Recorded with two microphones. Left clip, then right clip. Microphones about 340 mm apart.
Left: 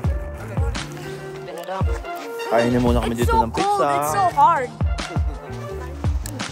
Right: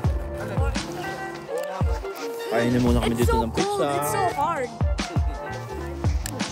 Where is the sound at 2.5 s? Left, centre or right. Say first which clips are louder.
Left 5 dB; centre.